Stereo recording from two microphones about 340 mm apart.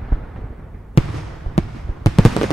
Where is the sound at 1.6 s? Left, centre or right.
Centre.